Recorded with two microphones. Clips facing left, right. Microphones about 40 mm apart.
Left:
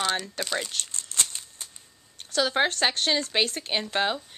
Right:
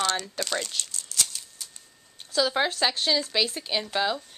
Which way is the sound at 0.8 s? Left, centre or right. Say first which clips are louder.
Even; left.